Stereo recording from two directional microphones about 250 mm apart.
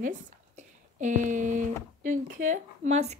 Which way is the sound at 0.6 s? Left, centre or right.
Right.